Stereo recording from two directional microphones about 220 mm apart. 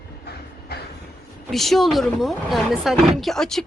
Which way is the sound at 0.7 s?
45° left (ahead or behind).